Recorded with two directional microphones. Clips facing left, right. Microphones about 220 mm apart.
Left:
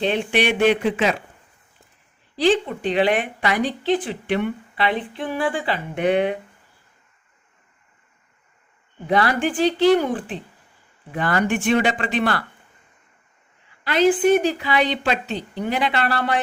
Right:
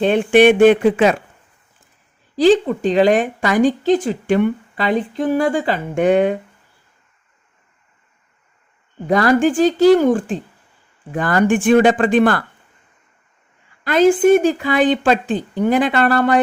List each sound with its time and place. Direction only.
0.0 s a woman's voice: 50° right (ahead or behind)
2.3 s a woman's voice: 45° right (ahead or behind)
9.0 s a woman's voice: 45° right (ahead or behind)
13.8 s a woman's voice: 45° right (ahead or behind)